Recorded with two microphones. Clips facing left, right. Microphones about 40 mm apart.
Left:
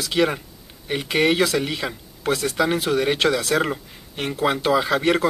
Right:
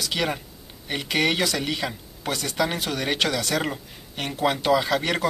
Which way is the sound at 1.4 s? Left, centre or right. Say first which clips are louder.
Left 3 dB; centre.